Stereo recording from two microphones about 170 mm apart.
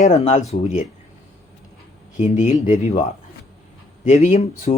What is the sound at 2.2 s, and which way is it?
Speech, 45° left (ahead or behind).